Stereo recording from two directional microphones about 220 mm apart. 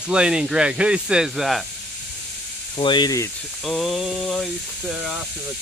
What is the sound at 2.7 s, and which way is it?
Speech, 20° left (ahead or behind).